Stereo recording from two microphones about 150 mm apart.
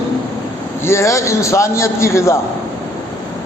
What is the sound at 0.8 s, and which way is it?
A man's voice, 20° left (ahead or behind).